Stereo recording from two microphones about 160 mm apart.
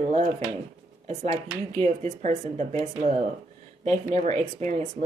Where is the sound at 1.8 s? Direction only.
45° right (ahead or behind).